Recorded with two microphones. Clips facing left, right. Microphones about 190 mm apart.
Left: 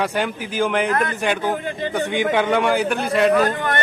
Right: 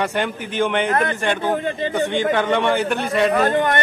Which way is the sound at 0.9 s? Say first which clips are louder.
Right 1 dB; 30° right (ahead or behind).